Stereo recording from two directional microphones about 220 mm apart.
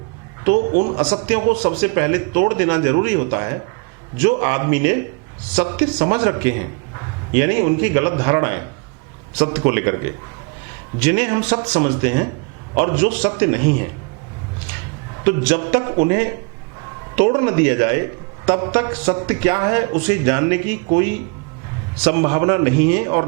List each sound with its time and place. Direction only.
0.5 s a man's voice: 40° right (ahead or behind)
1.3 s a man's voice: 15° right (ahead or behind)
15.2 s a man's voice: 15° right (ahead or behind)